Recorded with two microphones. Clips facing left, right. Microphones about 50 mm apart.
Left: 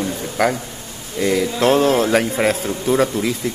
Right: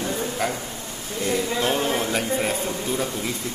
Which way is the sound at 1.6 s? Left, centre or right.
Left.